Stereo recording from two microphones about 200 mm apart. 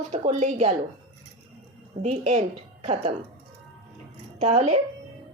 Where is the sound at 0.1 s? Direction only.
35° right (ahead or behind).